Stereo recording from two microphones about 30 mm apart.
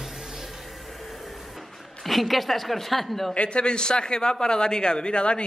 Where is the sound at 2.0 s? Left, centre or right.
Centre.